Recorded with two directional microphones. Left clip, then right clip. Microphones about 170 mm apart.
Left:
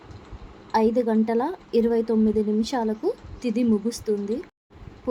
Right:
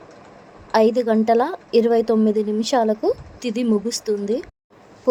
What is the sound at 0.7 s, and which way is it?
A woman's voice, 15° right (ahead or behind).